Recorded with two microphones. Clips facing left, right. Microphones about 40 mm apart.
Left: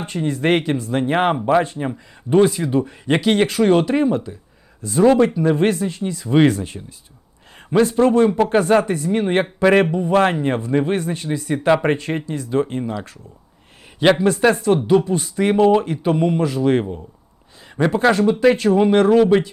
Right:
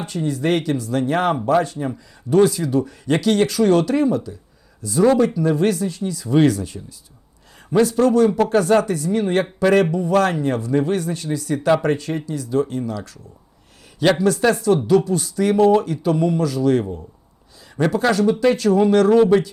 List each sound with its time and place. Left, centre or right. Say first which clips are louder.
0.0 s speech: left 1 dB; left